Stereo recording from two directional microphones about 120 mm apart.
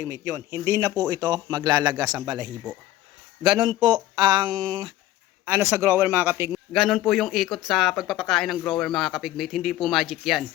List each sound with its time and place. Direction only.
0.0 s a man's voice: 20° right (ahead or behind)
5.5 s a man's voice: 20° right (ahead or behind)
6.7 s speech: centre (ahead or behind)